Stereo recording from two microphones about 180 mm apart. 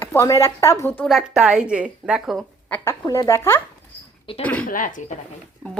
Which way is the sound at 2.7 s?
15° left (ahead or behind).